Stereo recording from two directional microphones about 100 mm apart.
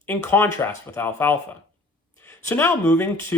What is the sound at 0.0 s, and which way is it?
Speech, 20° left (ahead or behind).